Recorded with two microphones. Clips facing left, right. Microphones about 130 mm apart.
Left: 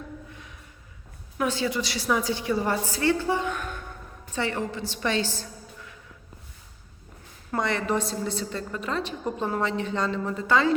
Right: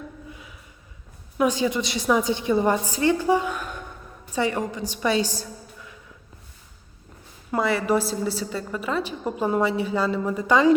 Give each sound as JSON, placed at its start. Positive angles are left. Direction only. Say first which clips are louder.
{"t": 1.4, "sound": "a woman's voice", "louder": "right 4 dB", "side_deg": -15}
{"t": 7.5, "sound": "a woman's voice", "louder": "right 4 dB", "side_deg": -5}